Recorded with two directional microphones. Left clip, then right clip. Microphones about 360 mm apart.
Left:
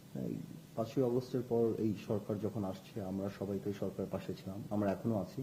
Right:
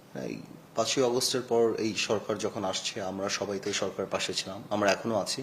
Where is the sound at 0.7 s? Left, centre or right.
Centre.